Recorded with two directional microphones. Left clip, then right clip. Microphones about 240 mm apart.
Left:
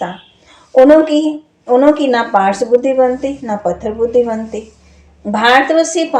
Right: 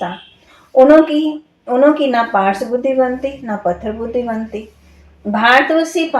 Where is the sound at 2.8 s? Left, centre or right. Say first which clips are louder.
Left 3 dB; left.